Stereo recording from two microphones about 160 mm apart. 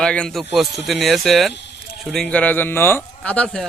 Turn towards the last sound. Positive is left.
turn(degrees=5)  # may be behind; listen again after turning